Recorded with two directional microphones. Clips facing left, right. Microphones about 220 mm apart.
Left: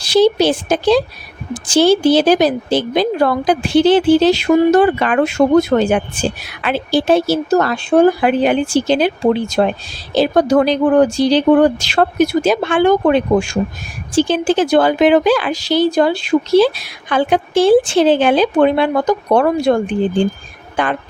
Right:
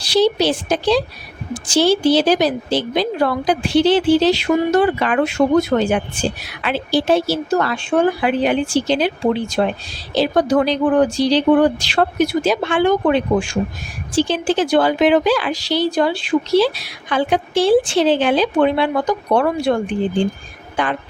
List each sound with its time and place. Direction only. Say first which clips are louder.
0.0 s a woman's voice: left 4 dB; 50° left (ahead or behind)